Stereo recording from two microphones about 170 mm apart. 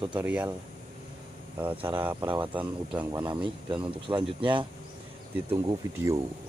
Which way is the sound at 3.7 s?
30° right (ahead or behind).